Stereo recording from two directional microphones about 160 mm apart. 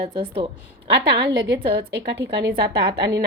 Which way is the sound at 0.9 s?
90° right.